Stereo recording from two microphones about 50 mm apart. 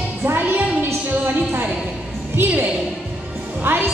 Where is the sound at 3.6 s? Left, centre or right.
Right.